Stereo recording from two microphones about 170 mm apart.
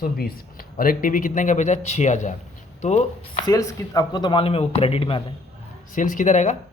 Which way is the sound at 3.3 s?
20° left (ahead or behind).